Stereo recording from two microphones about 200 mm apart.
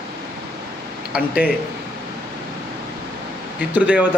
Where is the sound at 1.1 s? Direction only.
5° right (ahead or behind).